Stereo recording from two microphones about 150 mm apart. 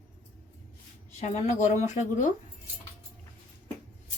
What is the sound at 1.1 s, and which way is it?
Speech, 45° left (ahead or behind).